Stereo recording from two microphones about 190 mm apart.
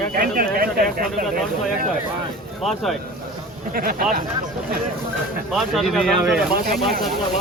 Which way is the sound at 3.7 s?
50° right (ahead or behind).